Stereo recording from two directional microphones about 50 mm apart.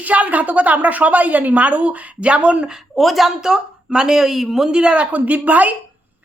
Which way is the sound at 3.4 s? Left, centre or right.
Centre.